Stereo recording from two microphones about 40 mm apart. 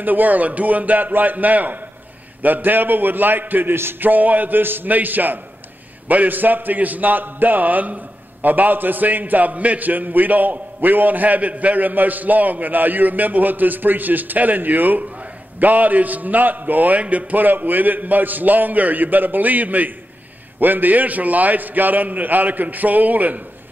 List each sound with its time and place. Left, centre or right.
0.0 s a man's voice: right
4.6 s a man's voice: right
17.0 s a man's voice: right